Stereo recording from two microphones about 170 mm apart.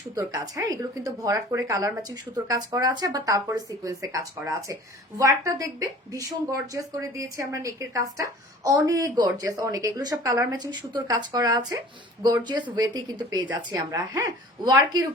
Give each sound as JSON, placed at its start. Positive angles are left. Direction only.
{"t": 0.2, "sound": "speech", "side_deg": -20}